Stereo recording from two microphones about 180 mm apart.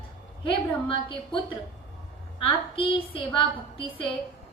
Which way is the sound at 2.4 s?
30° left (ahead or behind).